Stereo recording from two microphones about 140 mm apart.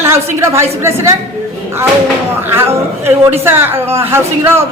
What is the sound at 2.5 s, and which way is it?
A man's voice, 20° right (ahead or behind).